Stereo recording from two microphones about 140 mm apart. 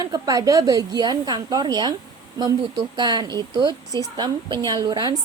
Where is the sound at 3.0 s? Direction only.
30° right (ahead or behind).